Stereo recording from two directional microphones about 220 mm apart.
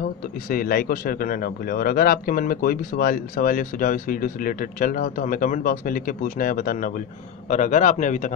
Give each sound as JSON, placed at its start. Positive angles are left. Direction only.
{"t": 0.5, "sound": "a man's voice", "side_deg": 40}